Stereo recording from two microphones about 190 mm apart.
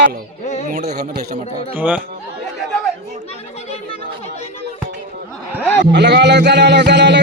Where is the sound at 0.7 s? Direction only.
35° right (ahead or behind).